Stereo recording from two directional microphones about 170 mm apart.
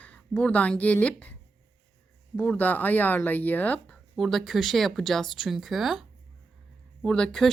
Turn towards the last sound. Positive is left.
turn(degrees=5)  # may be behind; listen again after turning